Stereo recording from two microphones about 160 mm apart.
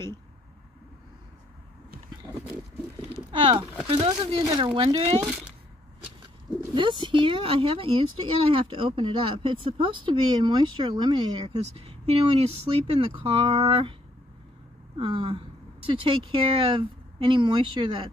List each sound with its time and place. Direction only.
3.0 s speech: 35° right (ahead or behind)
6.7 s speech: 30° right (ahead or behind)
15.0 s speech: 35° right (ahead or behind)